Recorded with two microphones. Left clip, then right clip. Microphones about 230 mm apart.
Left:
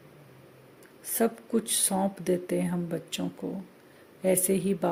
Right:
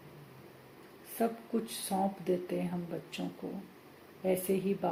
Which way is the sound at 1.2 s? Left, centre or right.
Left.